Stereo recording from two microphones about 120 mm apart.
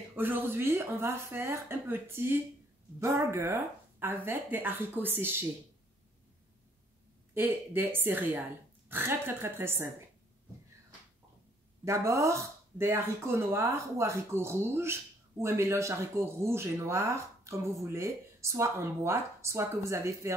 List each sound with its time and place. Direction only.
0.1 s a woman's voice: 15° right (ahead or behind)
7.3 s a woman's voice: 15° right (ahead or behind)
11.8 s speech: 25° right (ahead or behind)